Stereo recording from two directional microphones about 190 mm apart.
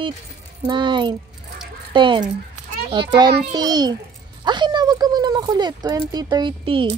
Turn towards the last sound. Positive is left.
turn(degrees=-25)  # may be behind; listen again after turning